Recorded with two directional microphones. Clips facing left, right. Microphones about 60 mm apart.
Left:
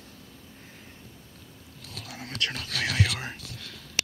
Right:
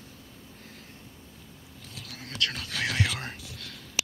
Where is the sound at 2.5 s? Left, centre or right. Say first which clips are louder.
Left 1 dB; centre.